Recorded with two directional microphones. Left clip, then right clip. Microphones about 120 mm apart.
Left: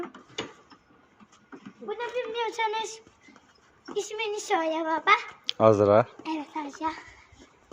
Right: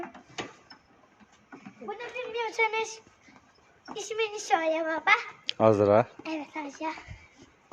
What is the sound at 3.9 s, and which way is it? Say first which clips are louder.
Speech: left 1 dB; 10° right (ahead or behind).